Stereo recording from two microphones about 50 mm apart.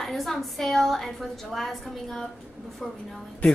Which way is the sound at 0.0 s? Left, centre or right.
Centre.